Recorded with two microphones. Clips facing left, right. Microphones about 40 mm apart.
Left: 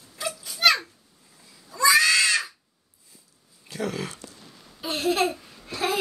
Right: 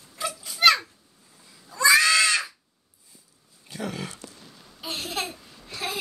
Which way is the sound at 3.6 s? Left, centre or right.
Centre.